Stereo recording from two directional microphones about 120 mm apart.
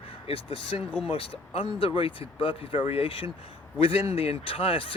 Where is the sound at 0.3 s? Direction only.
50° left (ahead or behind).